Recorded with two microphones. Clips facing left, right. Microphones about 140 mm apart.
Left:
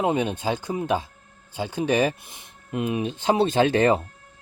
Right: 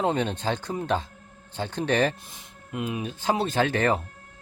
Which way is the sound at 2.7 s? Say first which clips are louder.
Left 5 dB; 20° left (ahead or behind).